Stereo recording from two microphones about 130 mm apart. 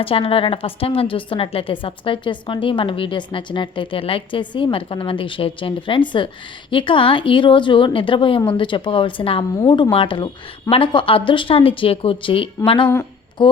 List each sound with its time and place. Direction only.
0.0 s a woman's voice: 45° left (ahead or behind)